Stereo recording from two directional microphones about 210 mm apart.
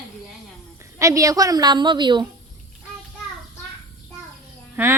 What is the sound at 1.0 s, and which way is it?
A woman's voice, 15° right (ahead or behind).